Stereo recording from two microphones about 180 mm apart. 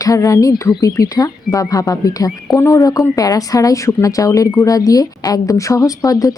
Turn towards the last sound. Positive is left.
turn(degrees=20)  # may be behind; listen again after turning